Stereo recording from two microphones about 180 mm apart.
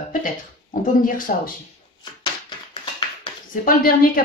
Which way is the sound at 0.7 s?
50° left (ahead or behind).